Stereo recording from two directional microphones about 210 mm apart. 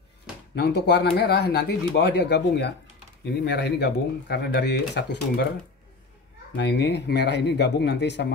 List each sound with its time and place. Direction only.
0.6 s speech: 50° left (ahead or behind)
6.5 s speech: 55° left (ahead or behind)